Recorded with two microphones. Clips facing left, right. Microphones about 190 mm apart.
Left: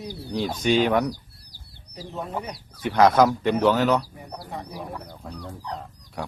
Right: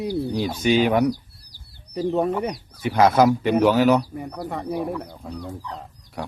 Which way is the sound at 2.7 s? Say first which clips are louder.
Even; 10° right (ahead or behind).